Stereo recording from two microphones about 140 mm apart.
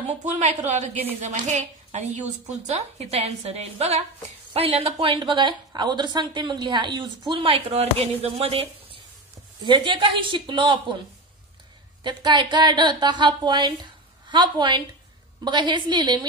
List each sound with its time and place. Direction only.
0.2 s a woman's voice: 55° right (ahead or behind)
9.7 s a woman's voice: 35° right (ahead or behind)
12.0 s a woman's voice: 35° right (ahead or behind)